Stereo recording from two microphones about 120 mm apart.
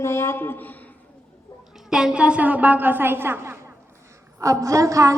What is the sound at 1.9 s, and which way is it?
A woman's voice, 5° right (ahead or behind).